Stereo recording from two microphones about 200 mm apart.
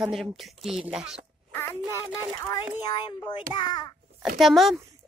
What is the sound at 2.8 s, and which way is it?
A child's voice, 20° left (ahead or behind).